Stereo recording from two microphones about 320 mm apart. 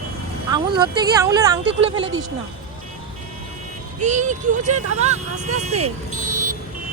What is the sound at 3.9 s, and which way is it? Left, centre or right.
Speech, right.